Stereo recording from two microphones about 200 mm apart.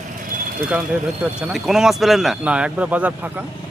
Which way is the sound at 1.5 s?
Centre (ahead or behind).